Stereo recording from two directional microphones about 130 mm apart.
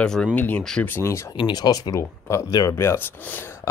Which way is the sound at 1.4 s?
30° left (ahead or behind).